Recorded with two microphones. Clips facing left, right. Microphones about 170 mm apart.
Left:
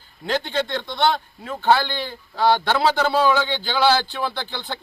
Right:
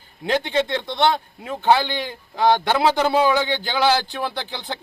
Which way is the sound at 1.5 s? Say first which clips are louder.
Right 1 dB; 15° right (ahead or behind).